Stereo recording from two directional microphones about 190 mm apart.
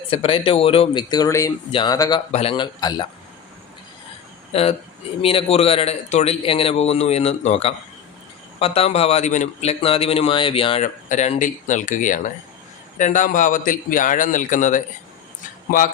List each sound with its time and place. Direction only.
0.1 s speech: 30° left (ahead or behind)
4.5 s a man's voice: 35° left (ahead or behind)